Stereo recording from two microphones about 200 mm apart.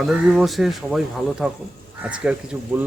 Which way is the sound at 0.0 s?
5° right (ahead or behind).